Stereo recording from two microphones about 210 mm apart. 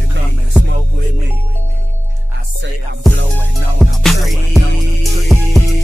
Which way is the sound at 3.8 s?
Centre (ahead or behind).